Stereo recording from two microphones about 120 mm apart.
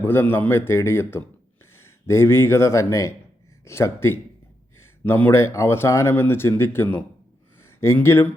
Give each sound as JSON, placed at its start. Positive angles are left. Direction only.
{"t": 0.0, "sound": "speech", "side_deg": 15}